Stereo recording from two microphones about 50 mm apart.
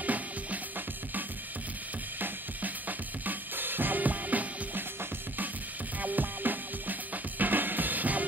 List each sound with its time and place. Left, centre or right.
0.0 s music: right
2.1 s drum kit: right
5.9 s drum: right